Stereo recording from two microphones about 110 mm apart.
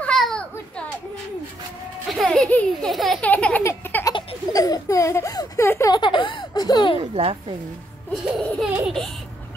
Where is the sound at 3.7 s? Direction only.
20° left (ahead or behind).